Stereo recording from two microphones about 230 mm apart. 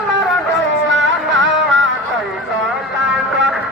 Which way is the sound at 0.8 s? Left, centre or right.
Right.